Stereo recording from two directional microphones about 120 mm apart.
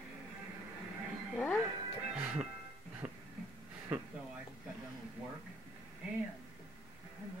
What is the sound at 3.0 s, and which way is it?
Music, 10° right (ahead or behind).